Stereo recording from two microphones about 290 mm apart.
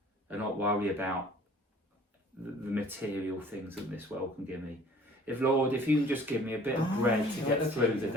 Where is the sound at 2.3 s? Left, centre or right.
Centre.